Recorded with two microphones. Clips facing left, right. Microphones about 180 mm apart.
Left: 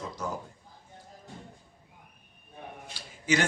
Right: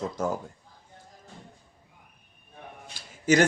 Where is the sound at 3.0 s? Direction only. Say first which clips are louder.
Left 2 dB; 45° right (ahead or behind).